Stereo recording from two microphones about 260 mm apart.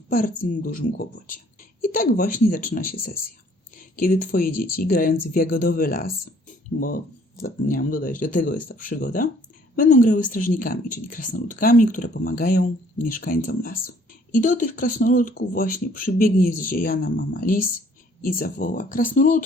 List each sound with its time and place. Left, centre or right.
0.1 s speech: left